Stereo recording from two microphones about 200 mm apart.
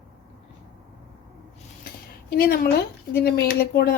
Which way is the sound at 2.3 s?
50° left (ahead or behind).